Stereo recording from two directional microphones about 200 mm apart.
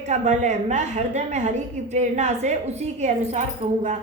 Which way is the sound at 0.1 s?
35° right (ahead or behind).